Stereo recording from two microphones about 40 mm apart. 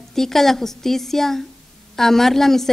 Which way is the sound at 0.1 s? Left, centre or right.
Centre.